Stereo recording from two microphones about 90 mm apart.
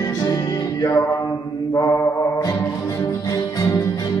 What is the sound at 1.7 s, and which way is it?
Mantra, 30° left (ahead or behind).